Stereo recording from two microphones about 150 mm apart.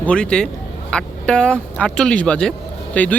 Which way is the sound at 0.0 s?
5° left (ahead or behind).